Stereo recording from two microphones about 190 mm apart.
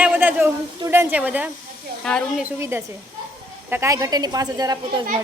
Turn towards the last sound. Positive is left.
turn(degrees=-20)  # may be behind; listen again after turning